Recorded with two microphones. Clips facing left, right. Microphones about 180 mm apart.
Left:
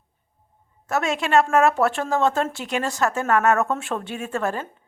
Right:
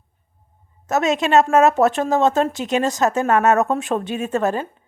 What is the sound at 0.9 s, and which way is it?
Speech, 20° right (ahead or behind).